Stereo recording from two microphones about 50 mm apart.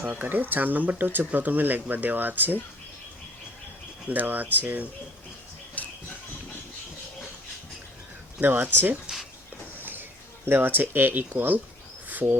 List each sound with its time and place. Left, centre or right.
0.1 s speech: right
4.1 s speech: right
5.8 s a sound: left
8.4 s speech: right
9.8 s a sound: right
10.4 s speech: right
12.0 s insect: right